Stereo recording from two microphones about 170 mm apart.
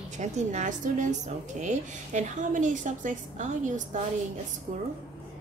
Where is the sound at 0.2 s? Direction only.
40° right (ahead or behind).